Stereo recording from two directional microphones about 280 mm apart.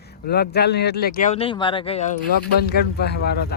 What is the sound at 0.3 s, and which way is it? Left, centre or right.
Speech, left.